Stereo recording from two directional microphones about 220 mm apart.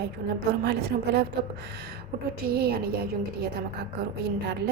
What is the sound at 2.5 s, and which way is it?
Speech, 45° right (ahead or behind).